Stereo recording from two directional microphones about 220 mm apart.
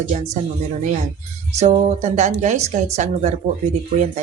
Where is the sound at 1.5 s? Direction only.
30° right (ahead or behind).